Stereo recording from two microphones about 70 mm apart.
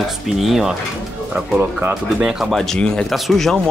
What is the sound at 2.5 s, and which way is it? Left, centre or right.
Speech, centre.